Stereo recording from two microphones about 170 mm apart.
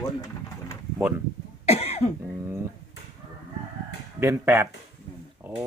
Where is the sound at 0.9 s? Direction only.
10° right (ahead or behind).